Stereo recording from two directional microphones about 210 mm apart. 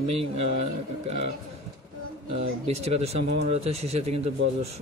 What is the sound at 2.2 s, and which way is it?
Speech, 30° right (ahead or behind).